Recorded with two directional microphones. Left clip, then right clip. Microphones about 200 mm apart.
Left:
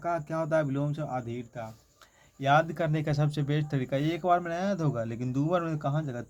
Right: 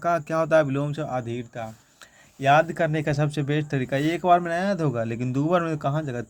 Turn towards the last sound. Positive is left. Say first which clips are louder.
# right 6 dB
turn(degrees=-25)  # may be behind; listen again after turning